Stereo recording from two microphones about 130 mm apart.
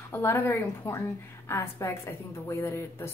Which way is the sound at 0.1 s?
20° left (ahead or behind).